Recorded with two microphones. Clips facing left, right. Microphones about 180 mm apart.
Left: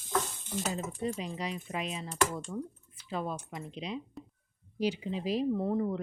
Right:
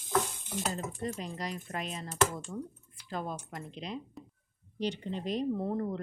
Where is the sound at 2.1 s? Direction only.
5° right (ahead or behind).